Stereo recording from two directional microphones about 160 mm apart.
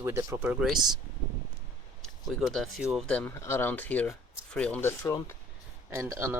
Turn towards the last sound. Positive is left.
turn(degrees=-15)  # may be behind; listen again after turning